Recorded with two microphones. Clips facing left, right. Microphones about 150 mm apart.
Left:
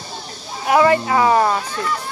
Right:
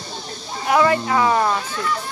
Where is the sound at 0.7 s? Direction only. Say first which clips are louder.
Left 3 dB; 20° left (ahead or behind).